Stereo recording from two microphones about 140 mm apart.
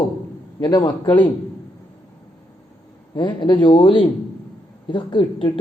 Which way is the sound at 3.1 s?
30° left (ahead or behind).